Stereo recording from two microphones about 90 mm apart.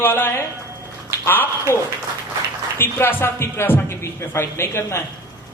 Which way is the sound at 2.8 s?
25° left (ahead or behind).